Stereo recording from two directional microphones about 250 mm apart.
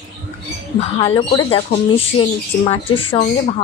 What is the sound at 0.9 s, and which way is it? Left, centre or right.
Speech, left.